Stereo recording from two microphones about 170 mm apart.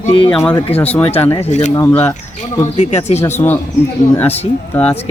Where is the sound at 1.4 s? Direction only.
45° left (ahead or behind).